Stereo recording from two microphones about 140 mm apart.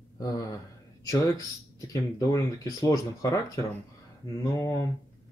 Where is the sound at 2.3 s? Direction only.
25° left (ahead or behind).